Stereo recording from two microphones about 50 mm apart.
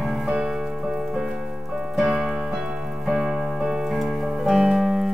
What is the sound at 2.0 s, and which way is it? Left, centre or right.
Piano, centre.